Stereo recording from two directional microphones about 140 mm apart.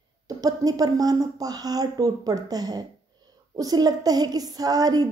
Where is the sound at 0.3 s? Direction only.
25° right (ahead or behind).